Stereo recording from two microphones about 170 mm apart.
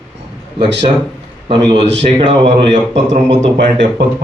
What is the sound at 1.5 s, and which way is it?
Speech, 30° right (ahead or behind).